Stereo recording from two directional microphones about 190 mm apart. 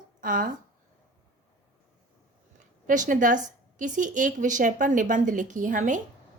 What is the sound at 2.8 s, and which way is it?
A woman's voice, 45° right (ahead or behind).